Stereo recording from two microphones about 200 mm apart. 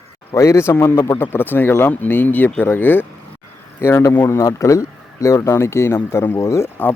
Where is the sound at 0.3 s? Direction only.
15° left (ahead or behind).